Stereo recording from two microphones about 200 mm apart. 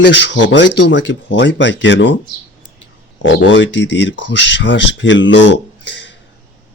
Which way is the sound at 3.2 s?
65° left (ahead or behind).